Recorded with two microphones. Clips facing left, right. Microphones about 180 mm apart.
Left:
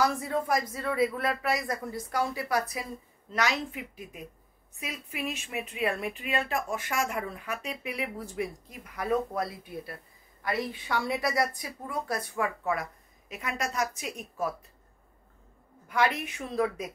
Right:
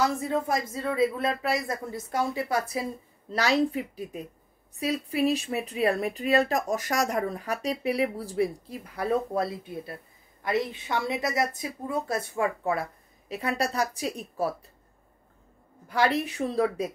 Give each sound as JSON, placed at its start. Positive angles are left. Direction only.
{"t": 0.0, "sound": "speech", "side_deg": -25}
{"t": 15.9, "sound": "speech", "side_deg": -35}